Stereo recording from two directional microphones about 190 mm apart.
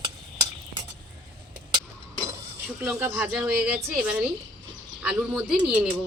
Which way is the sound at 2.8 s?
5° right (ahead or behind).